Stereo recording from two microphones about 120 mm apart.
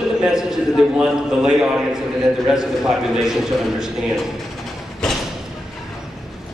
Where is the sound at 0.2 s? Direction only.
5° right (ahead or behind).